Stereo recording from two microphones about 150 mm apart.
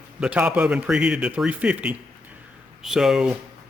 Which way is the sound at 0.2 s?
10° right (ahead or behind).